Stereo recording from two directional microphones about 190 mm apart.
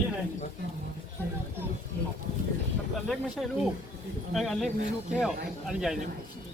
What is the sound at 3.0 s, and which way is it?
Speech, centre (ahead or behind).